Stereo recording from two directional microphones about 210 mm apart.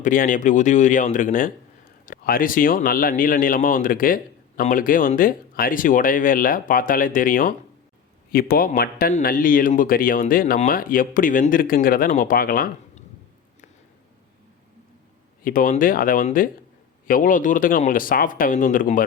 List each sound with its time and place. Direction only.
0.0 s speech: 40° left (ahead or behind)
15.4 s speech: 40° left (ahead or behind)